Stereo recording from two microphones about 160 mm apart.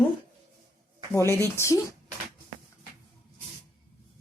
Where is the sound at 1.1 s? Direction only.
15° left (ahead or behind).